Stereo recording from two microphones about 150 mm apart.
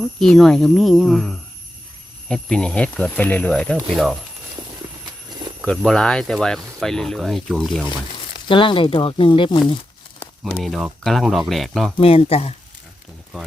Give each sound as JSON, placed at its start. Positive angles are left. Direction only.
{"t": 0.2, "sound": "speech", "side_deg": 5}
{"t": 5.0, "sound": "horse", "side_deg": -30}
{"t": 5.6, "sound": "speech", "side_deg": 5}
{"t": 8.4, "sound": "speech", "side_deg": 35}
{"t": 10.4, "sound": "speech", "side_deg": 0}
{"t": 11.9, "sound": "speech", "side_deg": 40}